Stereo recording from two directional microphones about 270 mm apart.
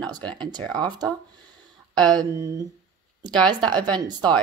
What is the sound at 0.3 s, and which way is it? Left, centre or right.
Speech, centre.